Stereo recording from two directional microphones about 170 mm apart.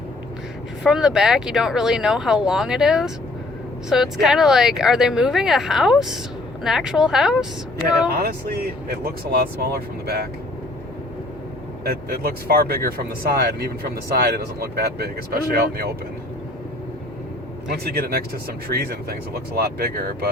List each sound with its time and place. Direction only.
0.9 s speech: 5° right (ahead or behind)
8.1 s speech: 65° right (ahead or behind)
11.9 s speech: 60° right (ahead or behind)
17.7 s speech: 65° right (ahead or behind)